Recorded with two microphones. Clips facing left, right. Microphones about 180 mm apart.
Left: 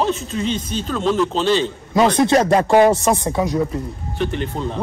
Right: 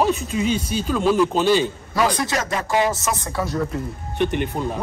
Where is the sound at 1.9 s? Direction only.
25° left (ahead or behind).